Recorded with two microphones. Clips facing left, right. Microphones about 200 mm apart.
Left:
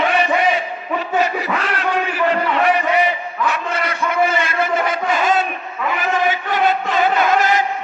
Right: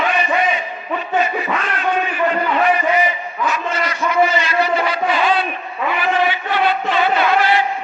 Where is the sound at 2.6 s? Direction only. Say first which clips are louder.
Left 1 dB; 65° left (ahead or behind); by 5.5 s 45° left (ahead or behind).